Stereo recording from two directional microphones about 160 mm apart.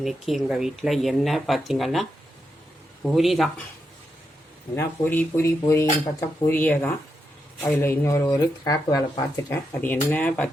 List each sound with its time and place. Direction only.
0.0 s speech: centre (ahead or behind)
4.7 s speech: 15° left (ahead or behind)